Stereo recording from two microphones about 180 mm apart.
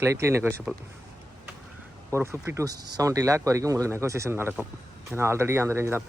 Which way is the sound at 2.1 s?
15° right (ahead or behind).